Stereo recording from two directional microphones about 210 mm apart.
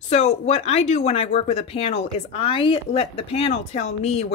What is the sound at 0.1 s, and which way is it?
Speech, 30° left (ahead or behind).